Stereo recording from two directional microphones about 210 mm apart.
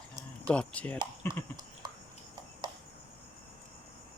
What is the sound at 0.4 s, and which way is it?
Speech, 5° left (ahead or behind).